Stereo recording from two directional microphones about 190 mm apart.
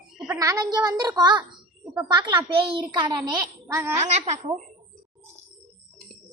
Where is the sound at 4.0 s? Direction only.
35° right (ahead or behind).